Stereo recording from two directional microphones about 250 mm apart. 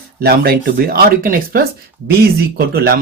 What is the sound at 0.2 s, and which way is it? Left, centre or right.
Speech, right.